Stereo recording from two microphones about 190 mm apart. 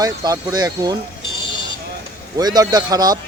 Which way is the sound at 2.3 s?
20° right (ahead or behind).